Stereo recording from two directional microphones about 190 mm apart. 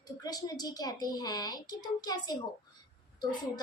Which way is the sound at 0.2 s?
20° left (ahead or behind).